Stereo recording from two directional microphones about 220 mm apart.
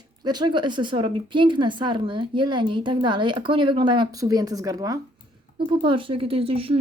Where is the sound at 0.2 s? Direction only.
20° right (ahead or behind).